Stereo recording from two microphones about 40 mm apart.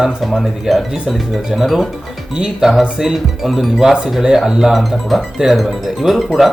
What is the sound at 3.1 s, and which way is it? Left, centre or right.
Speech, centre.